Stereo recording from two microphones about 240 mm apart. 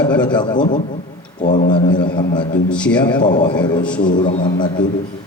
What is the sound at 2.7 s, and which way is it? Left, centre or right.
Speech, centre.